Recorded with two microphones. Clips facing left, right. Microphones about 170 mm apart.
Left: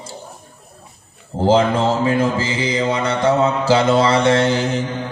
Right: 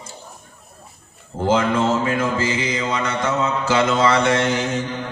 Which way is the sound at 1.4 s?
35° left (ahead or behind).